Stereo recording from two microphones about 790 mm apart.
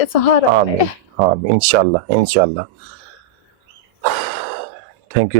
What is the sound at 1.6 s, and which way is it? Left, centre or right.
Speech, right.